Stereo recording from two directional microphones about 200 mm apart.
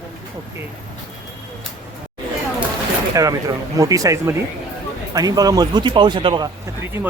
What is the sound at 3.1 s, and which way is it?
Speech, 15° right (ahead or behind).